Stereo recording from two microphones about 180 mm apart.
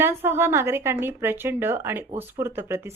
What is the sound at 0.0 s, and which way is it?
Speech, 10° right (ahead or behind).